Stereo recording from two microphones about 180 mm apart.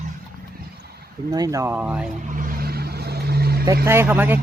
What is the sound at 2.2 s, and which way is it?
Vehicle, 50° right (ahead or behind).